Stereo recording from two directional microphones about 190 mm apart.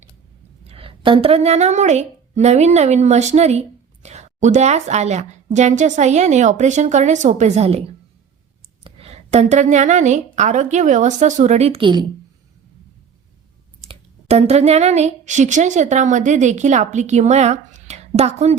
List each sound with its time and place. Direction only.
0.7 s a woman's voice: 30° right (ahead or behind)
13.8 s speech: 35° right (ahead or behind)